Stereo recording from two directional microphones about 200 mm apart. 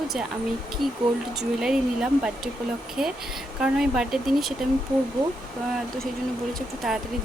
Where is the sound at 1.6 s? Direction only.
5° right (ahead or behind).